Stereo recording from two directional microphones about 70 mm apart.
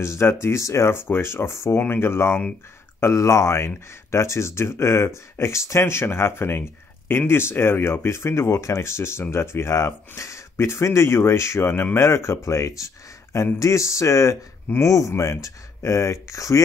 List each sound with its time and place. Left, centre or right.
0.0 s speech: left